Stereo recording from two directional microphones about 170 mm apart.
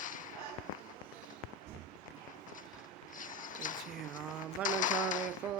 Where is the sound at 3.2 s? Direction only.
50° left (ahead or behind).